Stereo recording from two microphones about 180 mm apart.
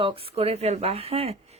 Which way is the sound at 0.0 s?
30° right (ahead or behind).